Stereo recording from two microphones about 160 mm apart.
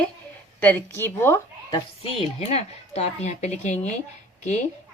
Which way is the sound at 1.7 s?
35° left (ahead or behind).